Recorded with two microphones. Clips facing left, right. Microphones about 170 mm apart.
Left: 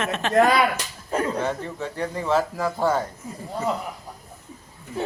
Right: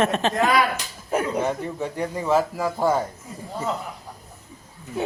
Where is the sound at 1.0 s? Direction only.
10° right (ahead or behind).